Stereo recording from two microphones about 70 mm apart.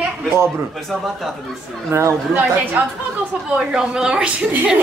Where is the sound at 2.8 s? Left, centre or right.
Right.